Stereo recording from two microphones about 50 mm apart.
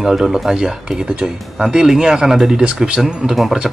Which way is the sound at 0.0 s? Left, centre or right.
Centre.